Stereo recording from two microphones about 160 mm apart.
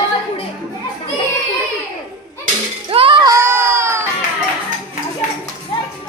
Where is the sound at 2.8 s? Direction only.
30° right (ahead or behind).